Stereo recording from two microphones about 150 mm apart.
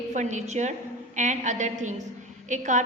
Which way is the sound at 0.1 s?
55° right (ahead or behind).